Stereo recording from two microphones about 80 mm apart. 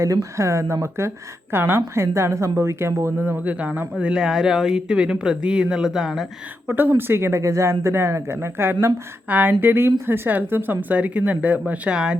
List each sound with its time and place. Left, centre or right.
0.0 s a woman's voice: right; by 6.2 s centre
6.7 s a woman's voice: right; by 12.1 s centre